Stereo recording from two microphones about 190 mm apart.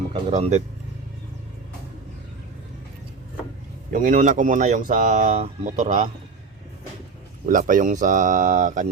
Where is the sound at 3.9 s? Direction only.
45° right (ahead or behind).